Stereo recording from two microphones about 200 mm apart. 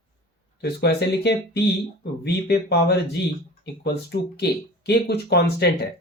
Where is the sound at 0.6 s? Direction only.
55° left (ahead or behind).